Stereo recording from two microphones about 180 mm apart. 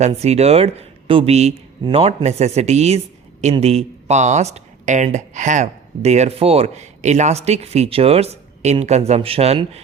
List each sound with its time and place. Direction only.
0.0 s speech: 35° right (ahead or behind)